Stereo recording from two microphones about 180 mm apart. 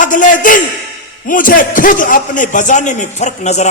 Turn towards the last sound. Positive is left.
turn(degrees=40)  # may be behind; listen again after turning